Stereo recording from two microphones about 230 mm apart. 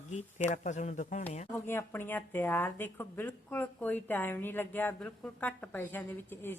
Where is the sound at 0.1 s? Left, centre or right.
Left.